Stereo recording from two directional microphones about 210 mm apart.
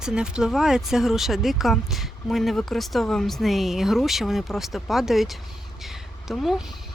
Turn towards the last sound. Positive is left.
turn(degrees=0)  # may be behind; listen again after turning